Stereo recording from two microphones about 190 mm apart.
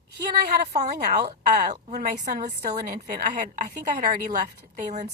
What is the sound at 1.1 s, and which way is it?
A woman's voice, 55° right (ahead or behind).